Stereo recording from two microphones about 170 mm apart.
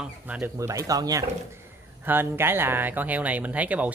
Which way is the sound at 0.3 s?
15° right (ahead or behind).